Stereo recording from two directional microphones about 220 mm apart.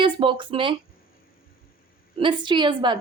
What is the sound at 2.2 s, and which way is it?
Speech, 20° right (ahead or behind).